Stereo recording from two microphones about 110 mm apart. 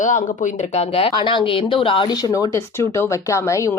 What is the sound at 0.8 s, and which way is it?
Speech, 75° left (ahead or behind).